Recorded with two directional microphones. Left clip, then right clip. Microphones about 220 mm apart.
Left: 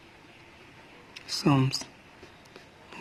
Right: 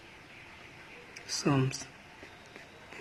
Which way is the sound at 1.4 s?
55° left (ahead or behind).